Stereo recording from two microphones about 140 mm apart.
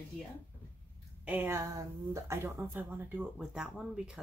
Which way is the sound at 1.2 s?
15° right (ahead or behind).